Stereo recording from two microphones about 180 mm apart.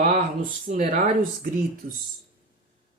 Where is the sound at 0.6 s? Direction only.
50° right (ahead or behind).